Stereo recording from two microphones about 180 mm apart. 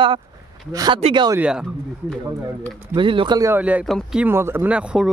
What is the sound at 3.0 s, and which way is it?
Speech, 30° right (ahead or behind).